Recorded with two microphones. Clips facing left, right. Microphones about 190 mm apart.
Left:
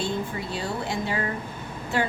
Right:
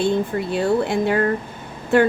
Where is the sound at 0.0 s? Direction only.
60° right (ahead or behind).